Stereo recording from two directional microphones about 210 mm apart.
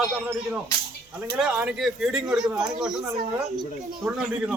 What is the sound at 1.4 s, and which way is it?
Speech, 5° right (ahead or behind).